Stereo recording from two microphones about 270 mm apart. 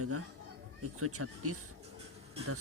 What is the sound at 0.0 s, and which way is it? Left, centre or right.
Speech, right.